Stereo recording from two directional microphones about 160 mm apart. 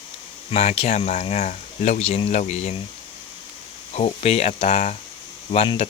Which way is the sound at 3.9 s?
40° left (ahead or behind).